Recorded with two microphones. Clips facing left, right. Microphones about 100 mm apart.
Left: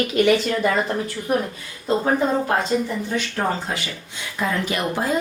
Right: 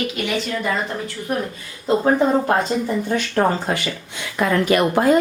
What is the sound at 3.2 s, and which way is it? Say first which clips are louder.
Speech: right 4 dB; 55° right (ahead or behind).